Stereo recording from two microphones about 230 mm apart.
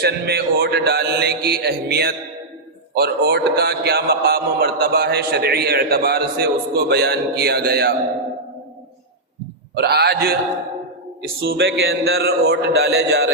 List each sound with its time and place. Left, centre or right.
0.0 s a man's voice: right
9.7 s a man's voice: right
11.3 s a man's voice: right